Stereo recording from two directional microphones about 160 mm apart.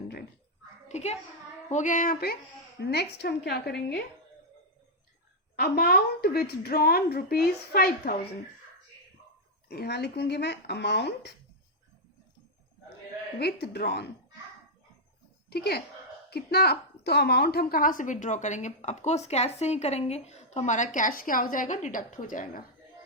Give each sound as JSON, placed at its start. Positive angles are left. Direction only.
{"t": 0.9, "sound": "a child's voice", "side_deg": 45}
{"t": 2.8, "sound": "speech", "side_deg": 90}
{"t": 5.5, "sound": "a woman's voice", "side_deg": 80}
{"t": 9.6, "sound": "speech", "side_deg": 85}
{"t": 13.4, "sound": "speech", "side_deg": 90}
{"t": 15.4, "sound": "a woman's voice", "side_deg": 85}